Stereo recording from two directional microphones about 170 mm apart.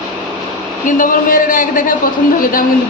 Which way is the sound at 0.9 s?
50° left (ahead or behind).